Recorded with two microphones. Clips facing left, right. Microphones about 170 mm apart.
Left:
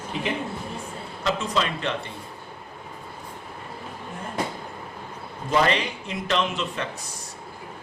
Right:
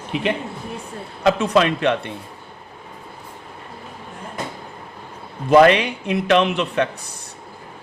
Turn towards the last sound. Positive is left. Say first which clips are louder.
# right 8 dB
turn(degrees=-65)  # may be behind; listen again after turning